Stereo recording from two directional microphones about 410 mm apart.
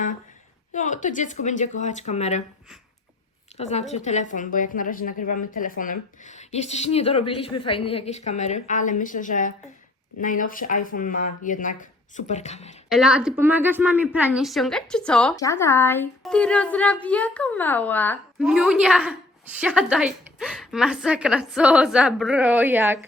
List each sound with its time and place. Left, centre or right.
0.7 s a woman's voice: centre
3.6 s a woman's voice: centre
12.9 s a woman's voice: centre